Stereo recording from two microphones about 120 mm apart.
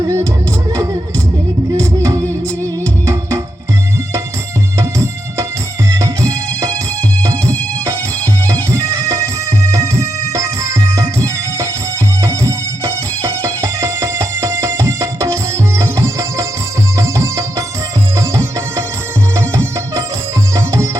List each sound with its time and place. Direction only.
0.0 s music: 25° right (ahead or behind)
1.7 s music: 25° right (ahead or behind)
4.8 s music: 25° right (ahead or behind)
12.2 s music: 25° right (ahead or behind)